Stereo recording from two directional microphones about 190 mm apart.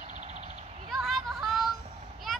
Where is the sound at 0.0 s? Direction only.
40° right (ahead or behind).